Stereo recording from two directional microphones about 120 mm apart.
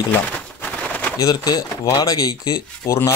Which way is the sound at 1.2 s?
35° left (ahead or behind).